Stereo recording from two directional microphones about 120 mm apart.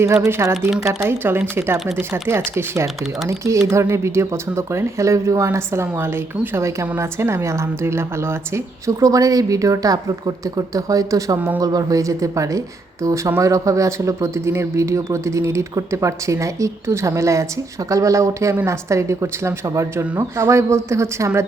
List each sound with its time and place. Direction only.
0.3 s speech: 20° right (ahead or behind)